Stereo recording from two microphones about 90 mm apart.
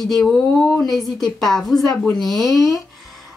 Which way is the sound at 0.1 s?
5° left (ahead or behind).